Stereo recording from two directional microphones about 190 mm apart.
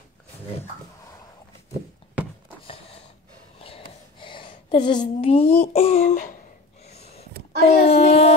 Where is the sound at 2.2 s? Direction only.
10° right (ahead or behind).